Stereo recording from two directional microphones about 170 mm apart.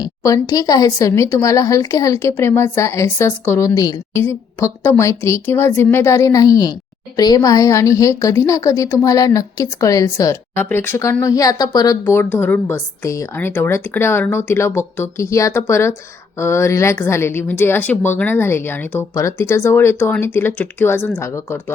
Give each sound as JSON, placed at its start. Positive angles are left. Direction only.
{"t": 0.0, "sound": "a woman's voice", "side_deg": 20}